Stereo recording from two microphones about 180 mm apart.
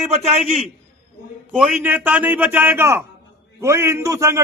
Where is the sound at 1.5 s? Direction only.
5° right (ahead or behind).